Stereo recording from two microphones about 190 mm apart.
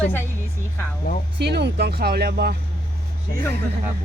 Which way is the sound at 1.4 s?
60° right (ahead or behind).